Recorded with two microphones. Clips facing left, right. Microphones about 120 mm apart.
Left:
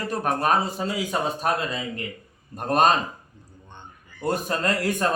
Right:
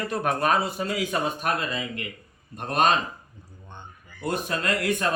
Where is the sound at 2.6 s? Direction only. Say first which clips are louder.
Left 3 dB; 40° left (ahead or behind).